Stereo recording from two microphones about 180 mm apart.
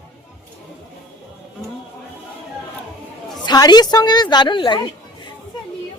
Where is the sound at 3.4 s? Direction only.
25° left (ahead or behind).